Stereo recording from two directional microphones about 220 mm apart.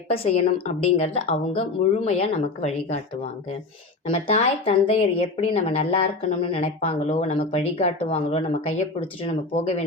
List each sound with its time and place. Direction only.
0.1 s speech: 25° left (ahead or behind)
4.1 s speech: 25° left (ahead or behind)